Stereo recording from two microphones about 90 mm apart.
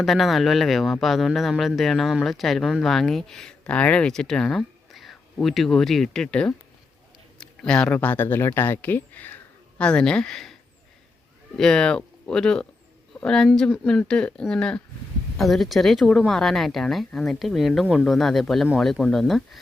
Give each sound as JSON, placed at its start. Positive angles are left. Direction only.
{"t": 0.0, "sound": "speech", "side_deg": 0}
{"t": 11.5, "sound": "speech", "side_deg": 5}